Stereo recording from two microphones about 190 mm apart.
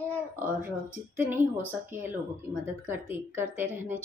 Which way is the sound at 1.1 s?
10° right (ahead or behind).